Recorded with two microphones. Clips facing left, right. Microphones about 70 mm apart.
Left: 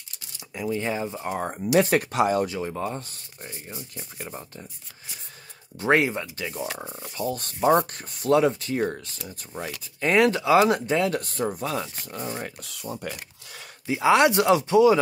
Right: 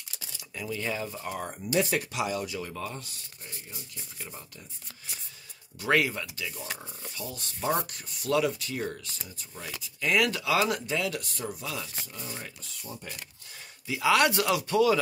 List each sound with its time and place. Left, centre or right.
0.6 s speech: left
1.8 s speech: left
2.6 s speech: left
5.8 s speech: left
6.2 s speech: left
12.8 s speech: left
13.8 s speech: left